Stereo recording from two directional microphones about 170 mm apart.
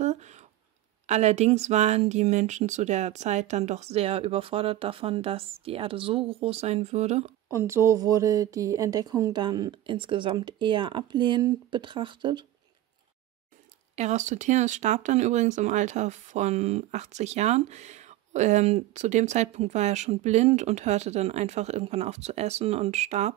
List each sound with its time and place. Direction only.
0.0 s a sound: 40° right (ahead or behind)
1.0 s speech: 40° right (ahead or behind)
7.5 s speech: 15° right (ahead or behind)
13.9 s speech: 45° right (ahead or behind)